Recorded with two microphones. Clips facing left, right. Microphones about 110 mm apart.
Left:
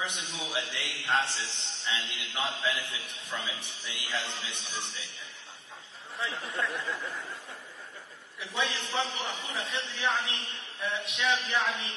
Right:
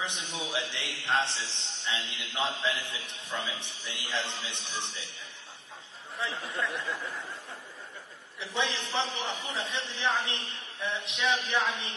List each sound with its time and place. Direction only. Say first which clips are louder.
0.0 s a man's voice: right 1 dB; 25° right (ahead or behind)
6.3 s speech: even; centre (ahead or behind)
8.4 s a man's voice: right 1 dB; 25° right (ahead or behind)